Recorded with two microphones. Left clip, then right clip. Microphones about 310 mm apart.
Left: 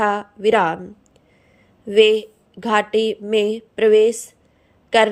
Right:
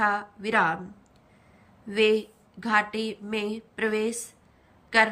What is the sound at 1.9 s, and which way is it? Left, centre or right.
A woman's voice, centre.